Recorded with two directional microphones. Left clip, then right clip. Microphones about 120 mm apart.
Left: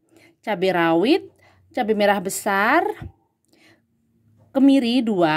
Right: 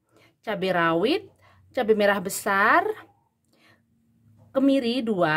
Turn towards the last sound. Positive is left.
turn(degrees=35)  # may be behind; listen again after turning